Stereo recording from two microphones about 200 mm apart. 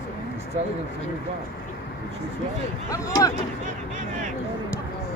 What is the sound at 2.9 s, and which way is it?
Speech, 15° left (ahead or behind).